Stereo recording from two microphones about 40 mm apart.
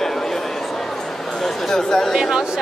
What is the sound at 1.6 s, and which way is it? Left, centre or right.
Speech, centre.